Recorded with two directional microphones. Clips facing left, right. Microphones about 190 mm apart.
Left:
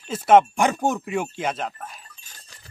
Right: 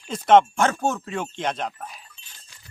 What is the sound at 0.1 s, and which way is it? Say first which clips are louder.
Speech: even; 10° left (ahead or behind).